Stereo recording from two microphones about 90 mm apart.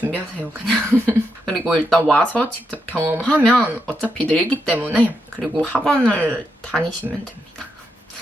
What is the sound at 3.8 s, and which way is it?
Speech, 15° left (ahead or behind).